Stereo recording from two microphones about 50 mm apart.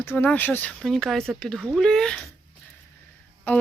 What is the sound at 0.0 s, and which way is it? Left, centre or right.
Speech, left.